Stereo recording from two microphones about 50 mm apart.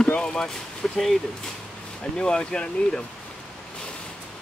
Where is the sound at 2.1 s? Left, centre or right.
Centre.